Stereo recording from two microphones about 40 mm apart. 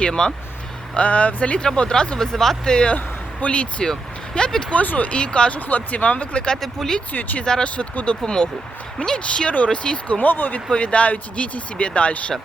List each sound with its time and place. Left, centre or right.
0.0 s speech: centre
0.9 s speech: left
1.6 s speech: centre
3.4 s speech: left
4.7 s speech: left
5.5 s speech: left
6.6 s speech: centre
7.1 s speech: left
7.6 s speech: left
10.2 s speech: left
10.7 s speech: left